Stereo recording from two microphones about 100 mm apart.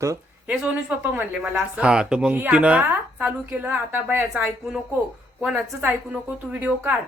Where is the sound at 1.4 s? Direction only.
10° right (ahead or behind).